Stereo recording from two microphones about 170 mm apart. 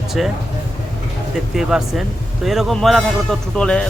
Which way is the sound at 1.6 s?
5° right (ahead or behind).